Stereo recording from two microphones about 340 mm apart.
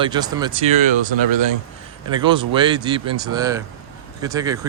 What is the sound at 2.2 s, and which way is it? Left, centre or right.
Speech, centre.